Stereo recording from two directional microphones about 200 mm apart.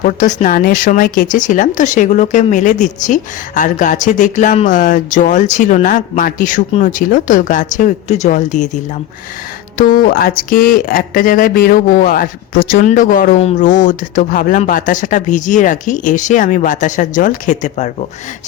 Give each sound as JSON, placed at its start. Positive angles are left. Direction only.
{"t": 0.0, "sound": "speech", "side_deg": 40}